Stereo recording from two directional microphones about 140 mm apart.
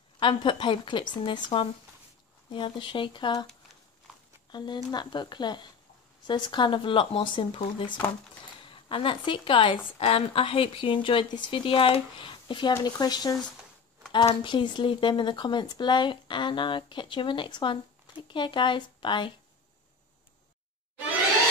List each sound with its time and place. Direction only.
0.2 s speech: 35° left (ahead or behind)
4.5 s speech: 30° left (ahead or behind)